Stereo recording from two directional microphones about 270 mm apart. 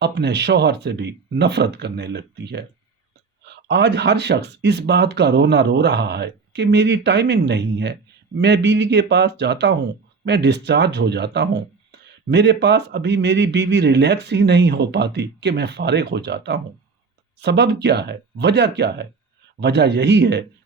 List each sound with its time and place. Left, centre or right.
0.0 s speech: right